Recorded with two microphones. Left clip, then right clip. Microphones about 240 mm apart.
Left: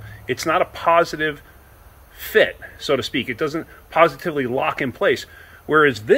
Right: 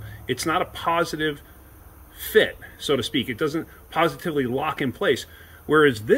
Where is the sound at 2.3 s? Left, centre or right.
Centre.